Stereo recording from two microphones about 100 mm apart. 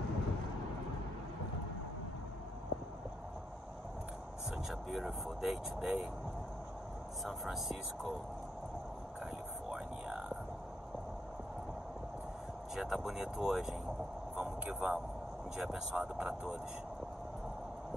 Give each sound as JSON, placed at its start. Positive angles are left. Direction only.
{"t": 4.6, "sound": "speech", "side_deg": -5}
{"t": 7.2, "sound": "speech", "side_deg": 0}
{"t": 9.7, "sound": "a sound", "side_deg": -10}
{"t": 12.7, "sound": "speech", "side_deg": -5}
{"t": 14.3, "sound": "a sound", "side_deg": -15}
{"t": 15.5, "sound": "speech", "side_deg": -5}